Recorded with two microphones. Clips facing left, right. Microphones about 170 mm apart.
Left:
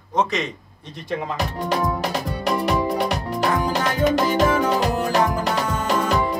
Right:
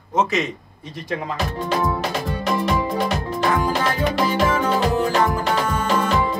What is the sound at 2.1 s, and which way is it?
Music, 35° left (ahead or behind).